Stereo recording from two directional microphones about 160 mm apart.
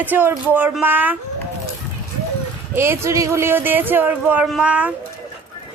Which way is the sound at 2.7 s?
15° right (ahead or behind).